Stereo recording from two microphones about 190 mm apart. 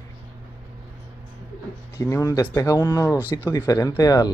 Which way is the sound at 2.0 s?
15° left (ahead or behind).